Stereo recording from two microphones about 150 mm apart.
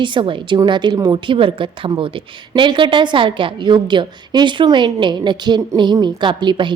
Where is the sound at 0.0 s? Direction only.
30° right (ahead or behind).